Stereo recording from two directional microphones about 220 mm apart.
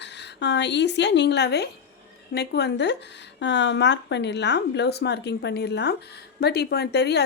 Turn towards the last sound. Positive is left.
turn(degrees=50)  # may be behind; listen again after turning